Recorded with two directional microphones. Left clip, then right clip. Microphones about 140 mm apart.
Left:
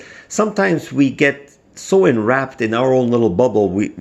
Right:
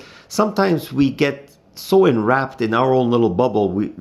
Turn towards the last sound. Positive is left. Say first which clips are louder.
# left 3 dB
turn(degrees=5)  # may be behind; listen again after turning